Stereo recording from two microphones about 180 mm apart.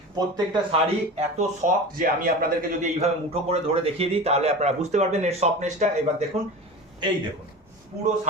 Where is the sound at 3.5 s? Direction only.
35° right (ahead or behind).